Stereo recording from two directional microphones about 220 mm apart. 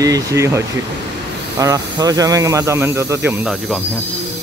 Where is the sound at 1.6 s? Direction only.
15° right (ahead or behind).